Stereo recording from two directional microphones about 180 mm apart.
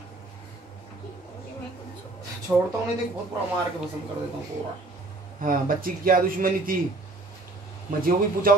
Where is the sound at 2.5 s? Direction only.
5° right (ahead or behind).